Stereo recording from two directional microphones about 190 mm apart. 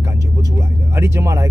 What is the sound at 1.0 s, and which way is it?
Speech, 15° right (ahead or behind).